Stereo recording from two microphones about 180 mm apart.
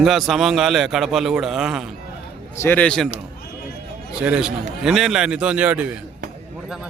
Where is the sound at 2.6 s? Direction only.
10° left (ahead or behind).